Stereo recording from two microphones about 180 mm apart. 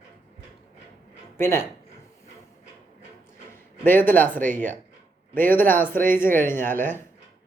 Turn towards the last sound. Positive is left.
turn(degrees=10)  # may be behind; listen again after turning